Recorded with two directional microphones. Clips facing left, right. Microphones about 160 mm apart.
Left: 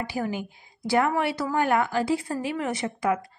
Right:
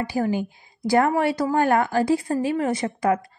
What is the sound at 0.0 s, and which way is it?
A woman's voice, 45° right (ahead or behind).